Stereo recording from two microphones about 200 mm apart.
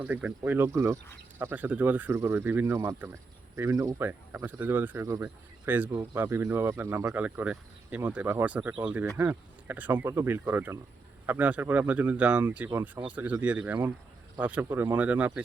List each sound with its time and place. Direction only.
0.0 s speech: 10° right (ahead or behind)